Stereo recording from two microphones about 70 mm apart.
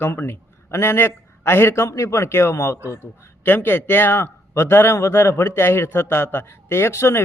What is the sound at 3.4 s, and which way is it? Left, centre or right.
A man's voice, left.